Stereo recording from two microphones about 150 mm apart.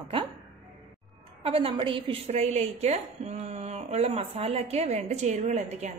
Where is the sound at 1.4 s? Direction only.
40° right (ahead or behind).